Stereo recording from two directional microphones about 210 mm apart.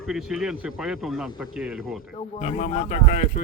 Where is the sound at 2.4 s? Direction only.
30° left (ahead or behind).